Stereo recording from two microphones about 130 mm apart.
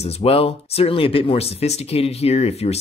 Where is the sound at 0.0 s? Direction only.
50° left (ahead or behind).